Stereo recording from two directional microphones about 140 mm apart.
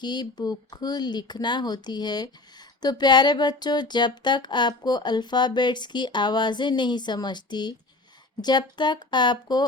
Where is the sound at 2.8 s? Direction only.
30° left (ahead or behind).